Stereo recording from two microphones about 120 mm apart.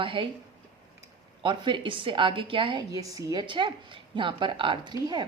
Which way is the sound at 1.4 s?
40° right (ahead or behind).